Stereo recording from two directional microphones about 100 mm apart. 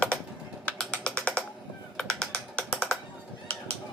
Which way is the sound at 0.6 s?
10° left (ahead or behind).